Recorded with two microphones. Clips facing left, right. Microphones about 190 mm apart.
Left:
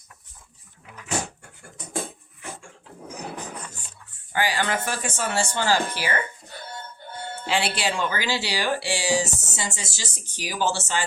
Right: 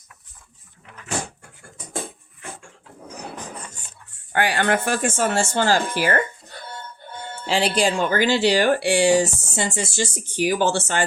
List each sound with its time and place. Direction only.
4.3 s speech: 60° right (ahead or behind)
7.4 s speech: 40° right (ahead or behind); by 11.0 s 55° right (ahead or behind)